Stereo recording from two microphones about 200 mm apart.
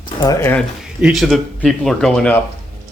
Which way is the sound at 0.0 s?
20° left (ahead or behind).